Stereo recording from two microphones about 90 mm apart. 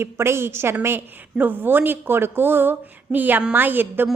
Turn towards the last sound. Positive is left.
turn(degrees=-25)  # may be behind; listen again after turning